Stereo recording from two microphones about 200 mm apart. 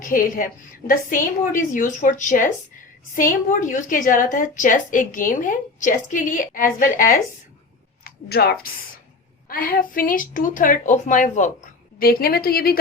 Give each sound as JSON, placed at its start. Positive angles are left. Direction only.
{"t": 0.0, "sound": "a woman's voice", "side_deg": 45}